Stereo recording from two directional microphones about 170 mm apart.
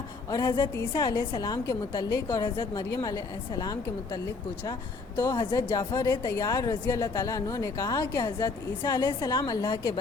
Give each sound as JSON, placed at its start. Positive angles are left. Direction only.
{"t": 0.3, "sound": "a woman's voice", "side_deg": 20}